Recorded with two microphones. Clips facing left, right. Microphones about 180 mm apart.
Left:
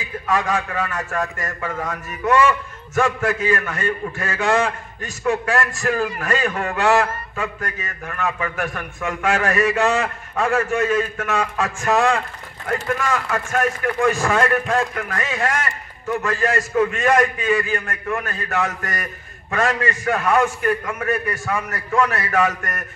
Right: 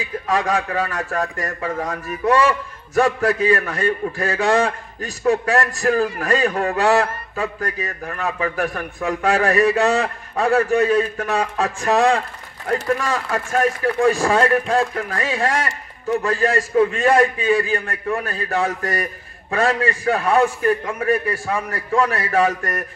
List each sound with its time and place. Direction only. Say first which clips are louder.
0.3 s a man's voice: right 1 dB; 35° right (ahead or behind)